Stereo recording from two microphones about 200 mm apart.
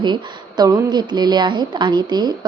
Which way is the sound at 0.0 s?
20° right (ahead or behind).